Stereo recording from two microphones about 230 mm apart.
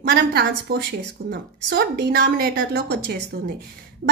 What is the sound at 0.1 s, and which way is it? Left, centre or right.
A woman's voice, right.